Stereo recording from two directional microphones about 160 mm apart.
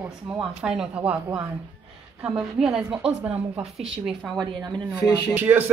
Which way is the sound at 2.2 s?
5° right (ahead or behind).